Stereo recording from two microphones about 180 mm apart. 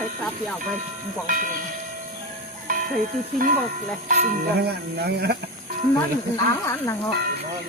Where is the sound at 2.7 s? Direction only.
45° right (ahead or behind).